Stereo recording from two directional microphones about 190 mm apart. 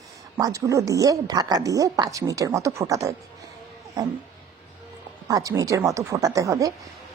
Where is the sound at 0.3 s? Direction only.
15° right (ahead or behind).